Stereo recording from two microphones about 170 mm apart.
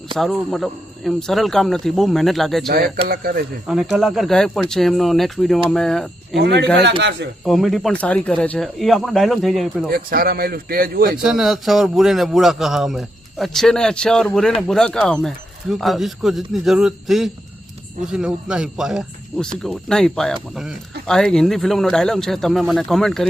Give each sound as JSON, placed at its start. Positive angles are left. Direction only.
{"t": 0.2, "sound": "a man's voice", "side_deg": 0}
{"t": 3.1, "sound": "speech", "side_deg": -60}
{"t": 3.7, "sound": "a man's voice", "side_deg": 0}
{"t": 6.3, "sound": "speech", "side_deg": -90}
{"t": 7.4, "sound": "a man's voice", "side_deg": 0}
{"t": 9.9, "sound": "speech", "side_deg": -60}
{"t": 11.2, "sound": "a man's voice", "side_deg": -5}